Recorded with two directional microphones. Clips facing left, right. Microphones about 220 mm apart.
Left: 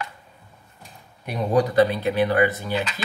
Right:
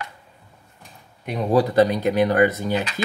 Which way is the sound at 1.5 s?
40° right (ahead or behind).